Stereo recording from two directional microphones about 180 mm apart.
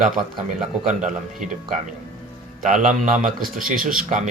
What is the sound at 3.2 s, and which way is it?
Speech, centre (ahead or behind).